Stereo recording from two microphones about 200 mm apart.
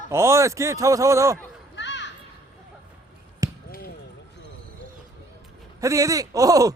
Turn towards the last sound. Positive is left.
turn(degrees=-15)  # may be behind; listen again after turning